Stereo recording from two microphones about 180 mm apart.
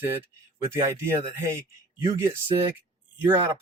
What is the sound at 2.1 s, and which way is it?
Speech, 15° right (ahead or behind).